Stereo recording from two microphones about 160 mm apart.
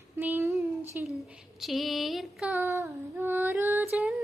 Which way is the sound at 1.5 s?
Centre (ahead or behind).